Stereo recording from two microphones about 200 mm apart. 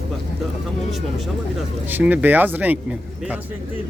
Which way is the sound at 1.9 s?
10° right (ahead or behind).